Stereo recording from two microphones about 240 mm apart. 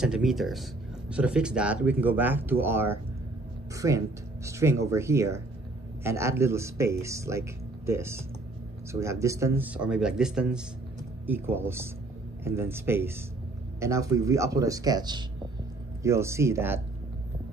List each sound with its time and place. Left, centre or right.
0.0 s speech: centre